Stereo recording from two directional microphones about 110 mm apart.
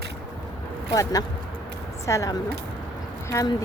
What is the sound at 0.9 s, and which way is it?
A woman's voice, 35° left (ahead or behind).